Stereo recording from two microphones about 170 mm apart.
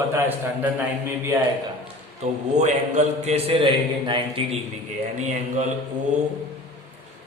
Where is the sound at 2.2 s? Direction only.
40° right (ahead or behind).